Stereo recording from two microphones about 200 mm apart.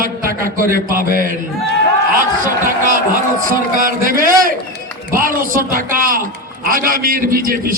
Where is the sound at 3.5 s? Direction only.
45° right (ahead or behind).